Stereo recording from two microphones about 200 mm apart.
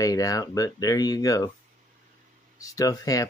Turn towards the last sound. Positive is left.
turn(degrees=20)  # may be behind; listen again after turning